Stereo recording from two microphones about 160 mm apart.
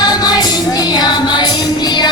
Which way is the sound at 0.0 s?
25° left (ahead or behind).